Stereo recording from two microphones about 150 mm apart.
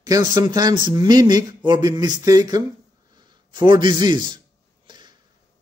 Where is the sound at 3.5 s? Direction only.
30° right (ahead or behind).